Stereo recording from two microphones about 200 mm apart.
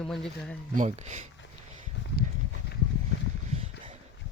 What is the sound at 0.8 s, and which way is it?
Speech, 35° right (ahead or behind).